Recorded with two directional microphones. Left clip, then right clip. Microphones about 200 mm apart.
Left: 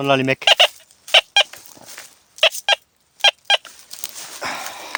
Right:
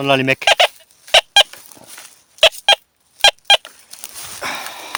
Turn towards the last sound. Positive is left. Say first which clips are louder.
# right 2 dB
turn(degrees=-10)  # may be behind; listen again after turning